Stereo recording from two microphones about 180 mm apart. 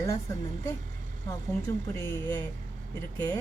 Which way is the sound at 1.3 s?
15° left (ahead or behind).